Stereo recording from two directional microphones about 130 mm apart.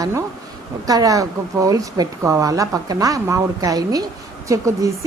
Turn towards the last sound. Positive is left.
turn(degrees=-25)  # may be behind; listen again after turning